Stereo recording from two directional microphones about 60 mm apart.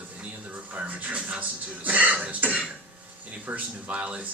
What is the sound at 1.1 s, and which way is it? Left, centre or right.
Speech, centre.